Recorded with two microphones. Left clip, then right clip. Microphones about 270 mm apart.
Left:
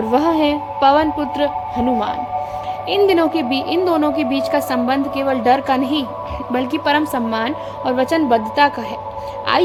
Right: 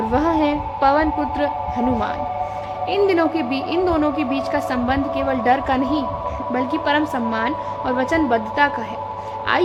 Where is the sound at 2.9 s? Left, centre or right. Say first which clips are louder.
Left 3 dB; centre.